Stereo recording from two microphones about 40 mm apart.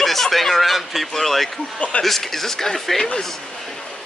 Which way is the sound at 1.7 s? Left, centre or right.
Left.